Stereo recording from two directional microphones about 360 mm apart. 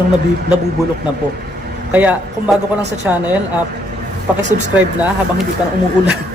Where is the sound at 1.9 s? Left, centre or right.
Centre.